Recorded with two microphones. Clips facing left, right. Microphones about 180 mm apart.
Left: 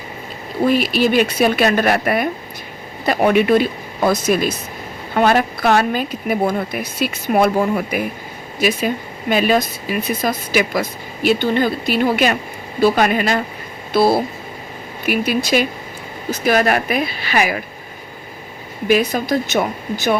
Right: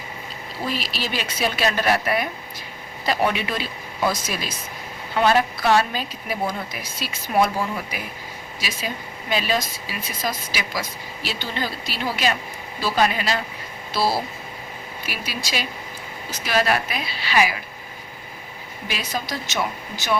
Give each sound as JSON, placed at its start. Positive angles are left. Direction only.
{"t": 0.6, "sound": "a woman's voice", "side_deg": 55}
{"t": 9.3, "sound": "a woman's voice", "side_deg": 55}
{"t": 18.9, "sound": "speech", "side_deg": 50}